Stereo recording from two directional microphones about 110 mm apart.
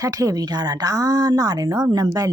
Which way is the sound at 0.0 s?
30° right (ahead or behind).